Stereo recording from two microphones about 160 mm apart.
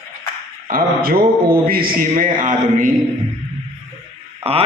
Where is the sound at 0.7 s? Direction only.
65° right (ahead or behind).